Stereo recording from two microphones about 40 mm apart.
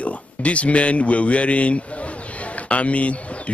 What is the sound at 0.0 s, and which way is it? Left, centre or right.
Speech, left.